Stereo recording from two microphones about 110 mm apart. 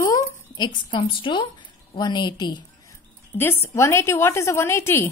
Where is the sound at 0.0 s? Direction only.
30° left (ahead or behind).